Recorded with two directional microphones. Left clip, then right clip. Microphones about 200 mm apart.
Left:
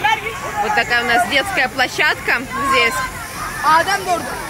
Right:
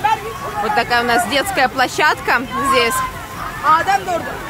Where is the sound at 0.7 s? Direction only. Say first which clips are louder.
Even; 15° right (ahead or behind).